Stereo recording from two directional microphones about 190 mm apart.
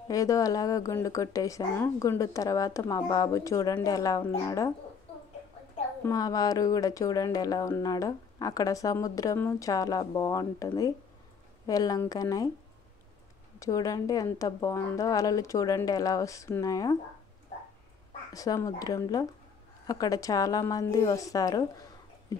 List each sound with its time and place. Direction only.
0.1 s speech: 15° left (ahead or behind)
6.0 s speech: 20° left (ahead or behind)
13.6 s speech: 20° left (ahead or behind)
18.3 s speech: 20° left (ahead or behind)